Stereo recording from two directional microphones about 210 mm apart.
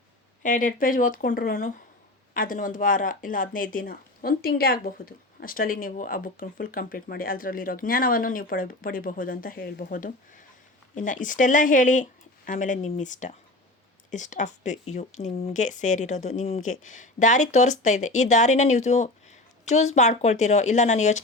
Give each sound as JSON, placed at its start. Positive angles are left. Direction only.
{"t": 0.4, "sound": "speech", "side_deg": 40}